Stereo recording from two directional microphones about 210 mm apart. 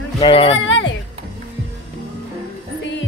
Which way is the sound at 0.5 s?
60° left (ahead or behind).